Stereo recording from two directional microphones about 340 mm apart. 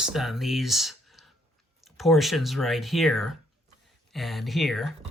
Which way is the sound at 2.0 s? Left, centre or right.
Centre.